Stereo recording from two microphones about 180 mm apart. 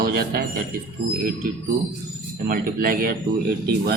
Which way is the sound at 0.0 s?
60° right (ahead or behind).